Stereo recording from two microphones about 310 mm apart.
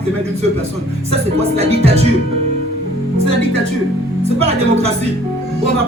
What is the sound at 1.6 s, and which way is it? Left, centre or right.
Speech, centre.